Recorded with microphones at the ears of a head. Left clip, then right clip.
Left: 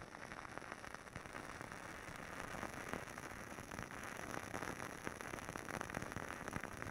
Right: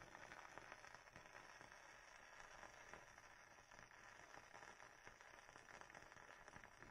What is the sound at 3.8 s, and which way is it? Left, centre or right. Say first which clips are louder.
Rain on surface: left 14 dB; left.